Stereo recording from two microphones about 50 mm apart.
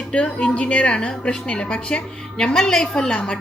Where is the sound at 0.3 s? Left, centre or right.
Left.